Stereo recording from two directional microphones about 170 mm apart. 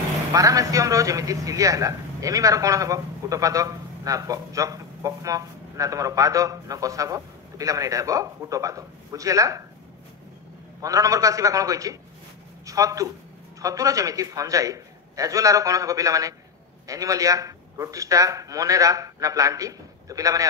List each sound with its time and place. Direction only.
0.3 s a man's voice: 20° right (ahead or behind)
10.8 s a man's voice: 20° right (ahead or behind)